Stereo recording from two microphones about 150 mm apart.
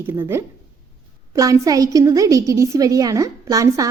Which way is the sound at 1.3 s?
25° right (ahead or behind).